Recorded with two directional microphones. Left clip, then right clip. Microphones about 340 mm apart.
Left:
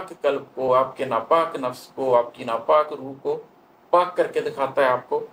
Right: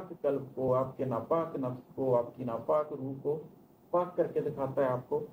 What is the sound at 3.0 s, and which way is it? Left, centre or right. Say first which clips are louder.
Speech: left 7 dB; centre.